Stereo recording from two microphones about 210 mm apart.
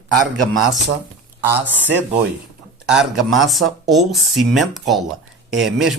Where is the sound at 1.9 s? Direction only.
5° right (ahead or behind).